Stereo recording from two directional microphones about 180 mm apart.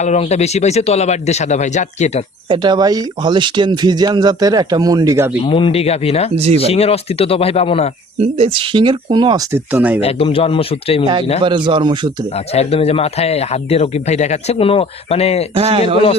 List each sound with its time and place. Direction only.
0.0 s speech: 40° left (ahead or behind)
2.5 s speech: 25° right (ahead or behind)
5.4 s speech: 30° left (ahead or behind)
6.3 s a man's voice: 35° right (ahead or behind)
6.6 s speech: 35° left (ahead or behind)
8.2 s speech: 30° right (ahead or behind)
9.5 s speech: 10° right (ahead or behind)
10.0 s speech: 35° left (ahead or behind)
11.4 s speech: 25° right (ahead or behind)
12.5 s speech: 35° left (ahead or behind)
15.5 s a man's voice: 35° right (ahead or behind)